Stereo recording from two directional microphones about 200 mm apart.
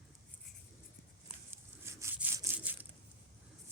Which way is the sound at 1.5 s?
15° right (ahead or behind).